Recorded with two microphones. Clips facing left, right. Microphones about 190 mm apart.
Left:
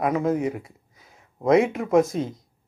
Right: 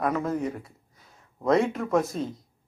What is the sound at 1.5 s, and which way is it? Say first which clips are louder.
Speech: left 4 dB; 5° left (ahead or behind).